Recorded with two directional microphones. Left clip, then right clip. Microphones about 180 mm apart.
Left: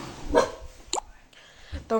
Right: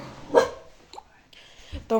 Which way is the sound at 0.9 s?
65° left (ahead or behind).